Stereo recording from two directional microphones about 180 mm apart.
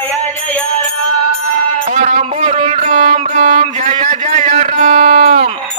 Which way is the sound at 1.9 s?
40° right (ahead or behind).